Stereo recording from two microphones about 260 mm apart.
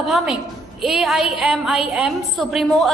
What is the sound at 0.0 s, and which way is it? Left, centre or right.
A woman's voice, centre.